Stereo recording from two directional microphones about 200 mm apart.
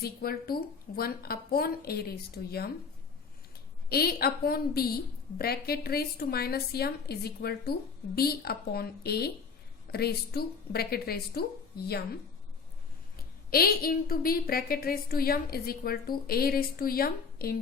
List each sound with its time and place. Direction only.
0.0 s a woman's voice: 50° left (ahead or behind)
3.8 s a woman's voice: 50° left (ahead or behind)
13.5 s a woman's voice: 50° left (ahead or behind)